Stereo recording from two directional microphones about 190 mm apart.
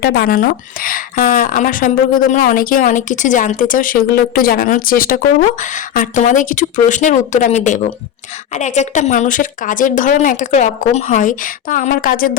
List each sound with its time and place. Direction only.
0.0 s a woman's voice: 60° left (ahead or behind)